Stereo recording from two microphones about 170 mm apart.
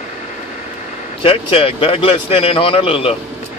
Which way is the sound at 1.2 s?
30° left (ahead or behind).